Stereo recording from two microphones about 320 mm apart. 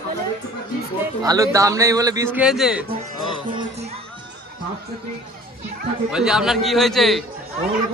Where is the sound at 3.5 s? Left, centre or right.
Centre.